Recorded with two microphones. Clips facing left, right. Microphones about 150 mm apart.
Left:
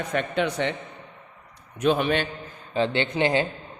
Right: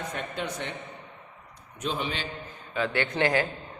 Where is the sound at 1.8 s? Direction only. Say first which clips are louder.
Left 9 dB; 60° left (ahead or behind).